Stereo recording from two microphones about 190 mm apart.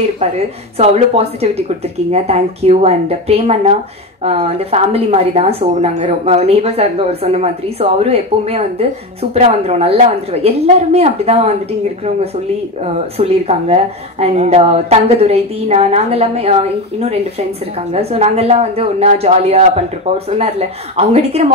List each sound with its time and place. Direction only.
0.7 s a woman's voice: 30° right (ahead or behind)
12.8 s a woman's voice: 30° right (ahead or behind)